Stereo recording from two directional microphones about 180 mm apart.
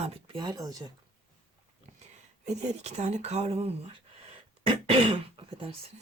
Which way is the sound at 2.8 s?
40° right (ahead or behind).